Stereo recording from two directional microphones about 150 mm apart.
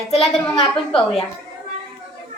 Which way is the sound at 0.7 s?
5° left (ahead or behind).